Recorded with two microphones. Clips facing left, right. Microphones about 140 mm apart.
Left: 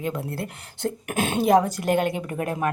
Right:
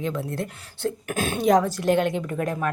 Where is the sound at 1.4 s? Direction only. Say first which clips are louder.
Even; 10° left (ahead or behind).